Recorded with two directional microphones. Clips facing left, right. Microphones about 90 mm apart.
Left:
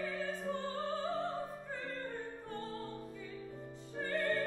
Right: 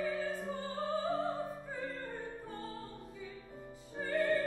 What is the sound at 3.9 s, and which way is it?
Music, centre (ahead or behind).